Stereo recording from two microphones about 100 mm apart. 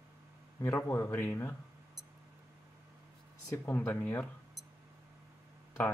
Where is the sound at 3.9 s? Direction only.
20° left (ahead or behind).